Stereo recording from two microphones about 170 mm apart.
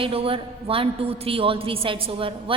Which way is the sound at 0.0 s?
35° right (ahead or behind).